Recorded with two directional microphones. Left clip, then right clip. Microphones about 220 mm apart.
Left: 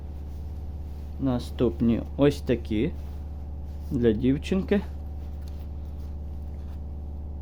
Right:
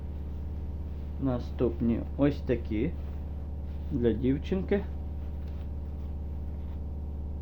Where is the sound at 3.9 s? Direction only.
50° left (ahead or behind).